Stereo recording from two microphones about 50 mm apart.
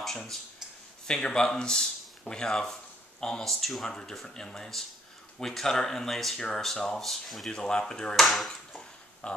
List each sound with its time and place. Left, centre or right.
1.0 s speech: centre
7.5 s speech: centre
8.3 s speech: centre
9.2 s pig: left